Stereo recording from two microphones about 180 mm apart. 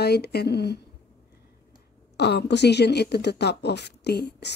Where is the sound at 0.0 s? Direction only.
65° left (ahead or behind).